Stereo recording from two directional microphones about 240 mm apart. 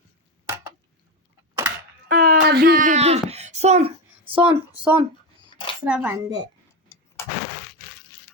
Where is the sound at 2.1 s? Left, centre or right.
Right.